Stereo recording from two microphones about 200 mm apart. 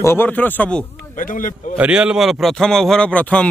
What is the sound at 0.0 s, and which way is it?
Speech, 10° left (ahead or behind).